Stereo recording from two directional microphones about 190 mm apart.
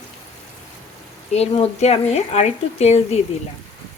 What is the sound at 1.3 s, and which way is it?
A woman's voice, 35° left (ahead or behind).